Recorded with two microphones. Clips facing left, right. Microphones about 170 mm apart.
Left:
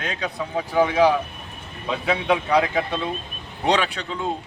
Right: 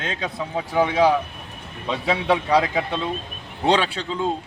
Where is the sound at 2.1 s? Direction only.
30° right (ahead or behind).